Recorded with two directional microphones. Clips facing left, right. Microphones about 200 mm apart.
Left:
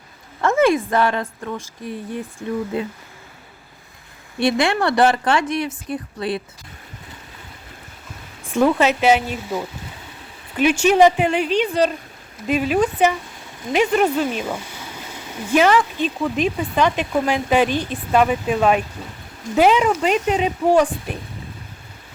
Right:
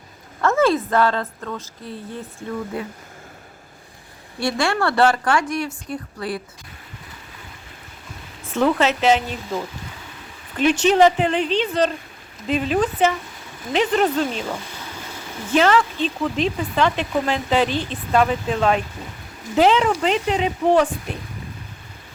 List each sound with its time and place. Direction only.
0.4 s a woman's voice: 15° left (ahead or behind)
4.4 s a woman's voice: 20° left (ahead or behind)
8.4 s speech: 15° left (ahead or behind)